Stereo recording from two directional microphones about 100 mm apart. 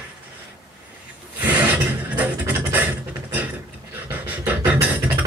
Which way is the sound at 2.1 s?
15° right (ahead or behind).